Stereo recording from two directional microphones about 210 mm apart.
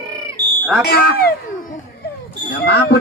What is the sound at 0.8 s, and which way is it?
Speech, 45° left (ahead or behind).